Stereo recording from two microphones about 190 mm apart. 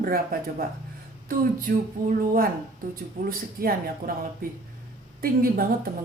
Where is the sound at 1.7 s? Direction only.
45° right (ahead or behind).